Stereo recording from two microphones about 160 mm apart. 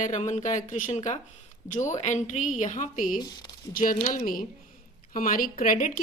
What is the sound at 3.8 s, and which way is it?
Speech, 60° left (ahead or behind).